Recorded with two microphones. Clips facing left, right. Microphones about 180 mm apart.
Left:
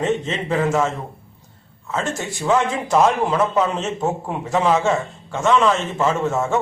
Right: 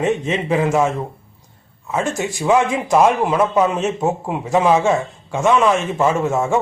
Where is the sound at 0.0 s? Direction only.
10° right (ahead or behind).